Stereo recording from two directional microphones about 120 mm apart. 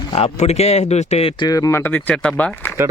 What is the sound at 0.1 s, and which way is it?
Speech, 60° left (ahead or behind).